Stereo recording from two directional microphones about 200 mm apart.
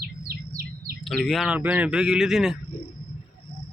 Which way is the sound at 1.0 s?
5° left (ahead or behind).